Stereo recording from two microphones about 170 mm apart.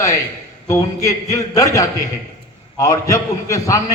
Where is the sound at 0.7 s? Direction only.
20° left (ahead or behind).